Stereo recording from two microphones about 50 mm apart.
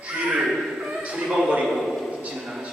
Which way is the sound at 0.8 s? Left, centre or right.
Centre.